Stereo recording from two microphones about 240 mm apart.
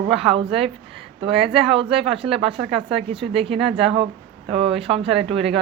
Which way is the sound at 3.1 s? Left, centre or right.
Right.